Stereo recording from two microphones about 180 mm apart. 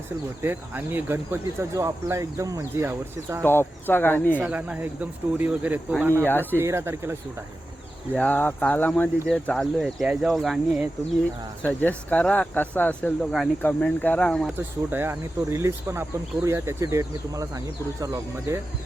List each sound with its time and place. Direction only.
0.4 s speech: 10° right (ahead or behind)
3.4 s speech: 10° left (ahead or behind)
4.4 s speech: 5° right (ahead or behind)
8.1 s speech: 10° left (ahead or behind)
11.6 s speech: 10° left (ahead or behind)
14.5 s speech: 10° right (ahead or behind)